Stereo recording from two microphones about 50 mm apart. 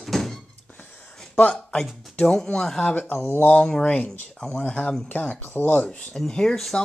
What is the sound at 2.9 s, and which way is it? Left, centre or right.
Speech, left.